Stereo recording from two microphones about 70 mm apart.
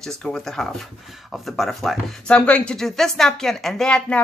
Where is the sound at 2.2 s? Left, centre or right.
Centre.